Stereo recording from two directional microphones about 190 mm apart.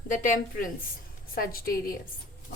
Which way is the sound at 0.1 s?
45° left (ahead or behind).